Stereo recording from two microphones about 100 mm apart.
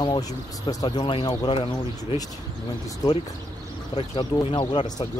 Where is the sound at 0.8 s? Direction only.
50° left (ahead or behind).